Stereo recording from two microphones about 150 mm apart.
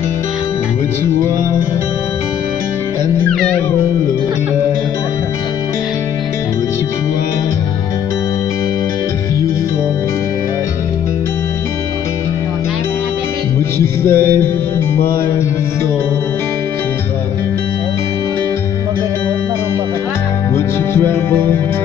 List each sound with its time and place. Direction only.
13.7 s music: 15° left (ahead or behind)
20.5 s music: 15° left (ahead or behind)